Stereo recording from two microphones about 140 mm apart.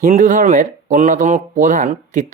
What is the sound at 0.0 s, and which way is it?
Speech, 60° right (ahead or behind).